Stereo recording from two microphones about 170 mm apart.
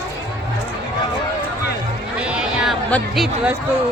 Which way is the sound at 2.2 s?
5° right (ahead or behind).